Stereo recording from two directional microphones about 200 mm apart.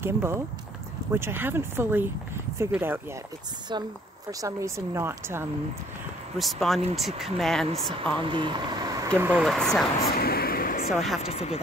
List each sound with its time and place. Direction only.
0.0 s speech: 10° right (ahead or behind)
3.7 s speech: 20° right (ahead or behind)
6.3 s speech: centre (ahead or behind)
8.2 s speech: 25° right (ahead or behind)
9.2 s speech: 5° right (ahead or behind)
10.0 s a sound: 50° left (ahead or behind)
10.9 s speech: centre (ahead or behind)
11.2 s speech: 30° left (ahead or behind)